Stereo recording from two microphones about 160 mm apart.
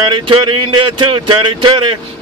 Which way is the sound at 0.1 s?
30° right (ahead or behind).